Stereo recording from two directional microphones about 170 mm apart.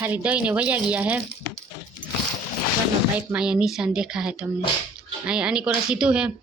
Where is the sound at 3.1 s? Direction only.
5° right (ahead or behind).